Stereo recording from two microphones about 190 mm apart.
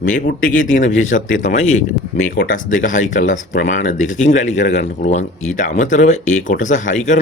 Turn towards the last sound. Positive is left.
turn(degrees=40)  # may be behind; listen again after turning